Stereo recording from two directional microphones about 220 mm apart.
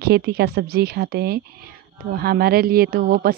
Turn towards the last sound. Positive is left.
turn(degrees=-45)  # may be behind; listen again after turning